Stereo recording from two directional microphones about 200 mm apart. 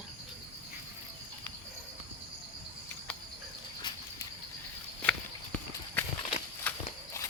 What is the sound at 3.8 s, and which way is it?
Bird flight, 20° left (ahead or behind).